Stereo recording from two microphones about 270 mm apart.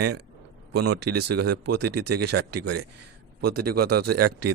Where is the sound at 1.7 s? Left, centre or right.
Right.